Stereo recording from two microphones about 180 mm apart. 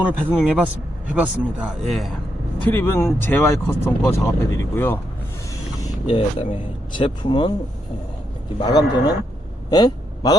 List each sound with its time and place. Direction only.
0.3 s speech: 5° right (ahead or behind)
2.6 s speech: 15° left (ahead or behind)
6.1 s a man's voice: 30° left (ahead or behind)
8.5 s a man's voice: 20° left (ahead or behind)
9.6 s a sound: 20° left (ahead or behind)